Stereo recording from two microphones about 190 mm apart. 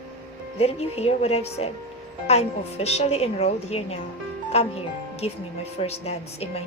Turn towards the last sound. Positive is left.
turn(degrees=35)  # may be behind; listen again after turning